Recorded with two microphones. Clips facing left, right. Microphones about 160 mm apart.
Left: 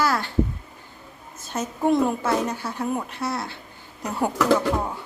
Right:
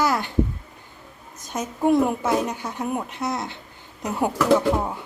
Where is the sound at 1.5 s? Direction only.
10° right (ahead or behind).